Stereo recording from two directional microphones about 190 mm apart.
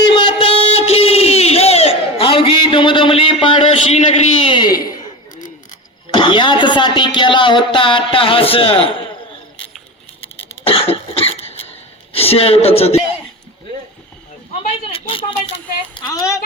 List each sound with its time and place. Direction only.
0.0 s a sound: 25° left (ahead or behind)
4.5 s speech: 20° left (ahead or behind)
6.1 s speech: 25° left (ahead or behind)
10.2 s cough: 30° left (ahead or behind)
12.1 s speech: 30° left (ahead or behind)
14.9 s speech: 30° left (ahead or behind)